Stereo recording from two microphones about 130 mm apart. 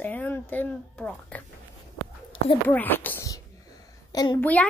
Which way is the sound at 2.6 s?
15° left (ahead or behind).